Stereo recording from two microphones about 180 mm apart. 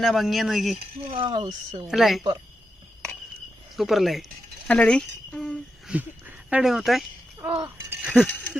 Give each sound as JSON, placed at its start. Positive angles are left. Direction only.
{"t": 0.0, "sound": "speech", "side_deg": 0}
{"t": 1.1, "sound": "speech", "side_deg": -30}
{"t": 1.9, "sound": "speech", "side_deg": 0}
{"t": 3.8, "sound": "speech", "side_deg": 0}
{"t": 5.9, "sound": "speech", "side_deg": -10}
{"t": 7.3, "sound": "a sound", "side_deg": -10}
{"t": 7.9, "sound": "speech", "side_deg": -5}